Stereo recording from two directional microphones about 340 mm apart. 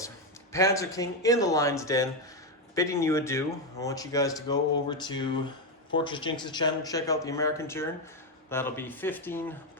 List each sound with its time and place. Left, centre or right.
0.5 s speech: centre